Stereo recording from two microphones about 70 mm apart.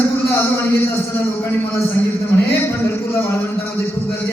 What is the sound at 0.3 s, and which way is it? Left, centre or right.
A man's voice, left.